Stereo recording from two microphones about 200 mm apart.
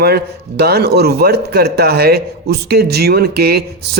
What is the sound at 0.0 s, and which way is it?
A man's voice, 55° right (ahead or behind).